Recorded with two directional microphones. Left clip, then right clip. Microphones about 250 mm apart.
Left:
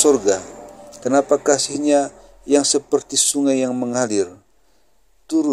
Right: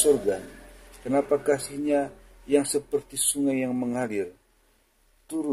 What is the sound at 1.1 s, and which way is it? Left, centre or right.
A man's voice, left.